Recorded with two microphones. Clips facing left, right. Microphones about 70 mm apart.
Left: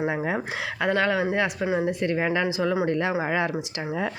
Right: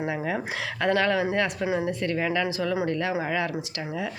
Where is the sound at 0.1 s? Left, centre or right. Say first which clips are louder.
Left 2 dB; left.